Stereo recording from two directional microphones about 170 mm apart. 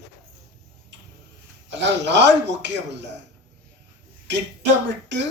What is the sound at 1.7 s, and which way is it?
Speech, 90° right.